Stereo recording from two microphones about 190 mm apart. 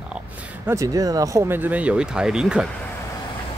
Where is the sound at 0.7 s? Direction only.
15° right (ahead or behind).